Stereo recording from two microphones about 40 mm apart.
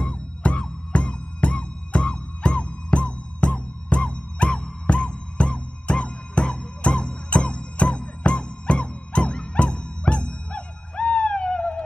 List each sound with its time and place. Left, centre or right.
0.0 s music: left